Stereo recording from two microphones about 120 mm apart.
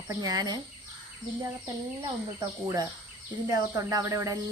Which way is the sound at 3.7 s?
30° right (ahead or behind).